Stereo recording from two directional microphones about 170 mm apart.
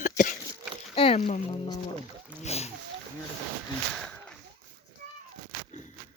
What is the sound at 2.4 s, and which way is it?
Speech, 40° left (ahead or behind).